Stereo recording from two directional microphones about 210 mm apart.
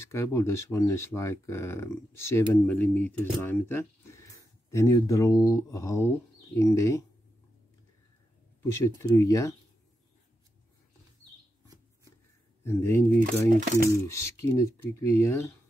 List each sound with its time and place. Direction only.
0.1 s speech: 10° left (ahead or behind)
8.7 s speech: 15° left (ahead or behind)
11.6 s a sound: 15° right (ahead or behind)
12.6 s speech: 10° left (ahead or behind)
13.2 s speech: 40° right (ahead or behind)
14.0 s speech: 10° left (ahead or behind)